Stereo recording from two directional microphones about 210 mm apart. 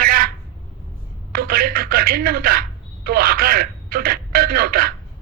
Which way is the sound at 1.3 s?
45° right (ahead or behind).